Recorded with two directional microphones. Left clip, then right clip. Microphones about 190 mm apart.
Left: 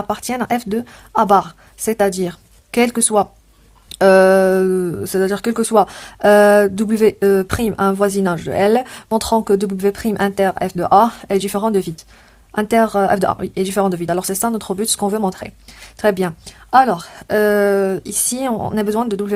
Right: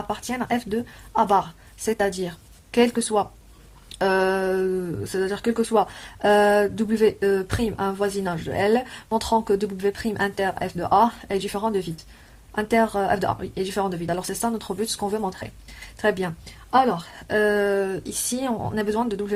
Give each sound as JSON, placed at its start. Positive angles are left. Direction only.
{"t": 0.1, "sound": "speech", "side_deg": 35}